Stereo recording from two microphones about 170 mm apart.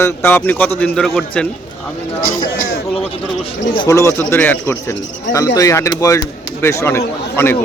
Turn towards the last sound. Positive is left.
turn(degrees=15)  # may be behind; listen again after turning